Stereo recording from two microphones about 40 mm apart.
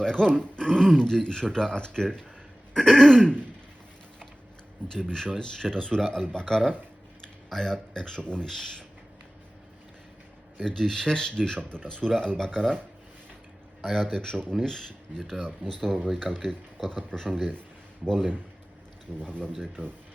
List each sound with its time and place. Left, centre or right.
0.0 s speech: centre
4.9 s speech: left
10.6 s speech: centre
13.9 s speech: centre
17.1 s speech: centre
19.2 s speech: left
19.8 s speech: right